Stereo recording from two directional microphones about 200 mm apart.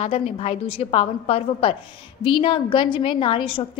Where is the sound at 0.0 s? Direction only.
30° left (ahead or behind).